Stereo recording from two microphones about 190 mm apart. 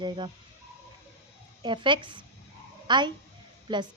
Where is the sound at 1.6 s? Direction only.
25° right (ahead or behind).